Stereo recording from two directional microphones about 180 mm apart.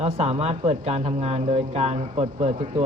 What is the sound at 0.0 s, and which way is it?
Speech, 35° right (ahead or behind).